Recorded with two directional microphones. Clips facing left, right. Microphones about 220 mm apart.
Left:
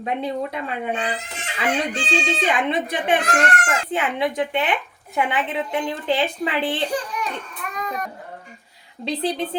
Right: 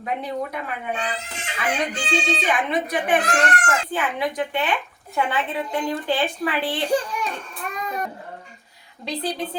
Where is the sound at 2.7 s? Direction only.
25° left (ahead or behind).